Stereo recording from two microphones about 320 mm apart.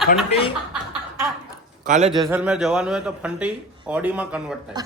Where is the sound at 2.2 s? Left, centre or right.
Centre.